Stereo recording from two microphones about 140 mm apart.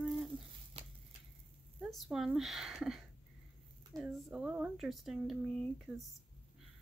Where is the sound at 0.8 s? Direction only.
45° right (ahead or behind).